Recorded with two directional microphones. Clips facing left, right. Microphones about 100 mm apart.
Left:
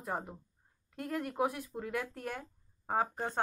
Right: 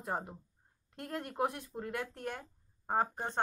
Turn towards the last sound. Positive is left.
turn(degrees=0)  # may be behind; listen again after turning